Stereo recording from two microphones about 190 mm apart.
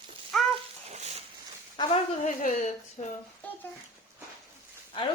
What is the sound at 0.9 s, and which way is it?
Stir, 35° right (ahead or behind).